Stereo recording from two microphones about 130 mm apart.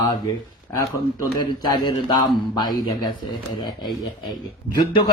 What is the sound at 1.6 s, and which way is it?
Speech, 30° left (ahead or behind).